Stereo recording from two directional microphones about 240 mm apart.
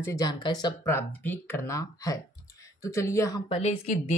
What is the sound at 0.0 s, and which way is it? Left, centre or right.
Speech, centre.